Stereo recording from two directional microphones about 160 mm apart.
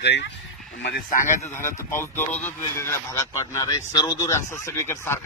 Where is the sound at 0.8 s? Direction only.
90° left.